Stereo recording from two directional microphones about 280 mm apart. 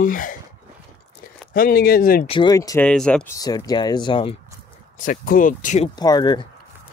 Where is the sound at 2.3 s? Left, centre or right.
Centre.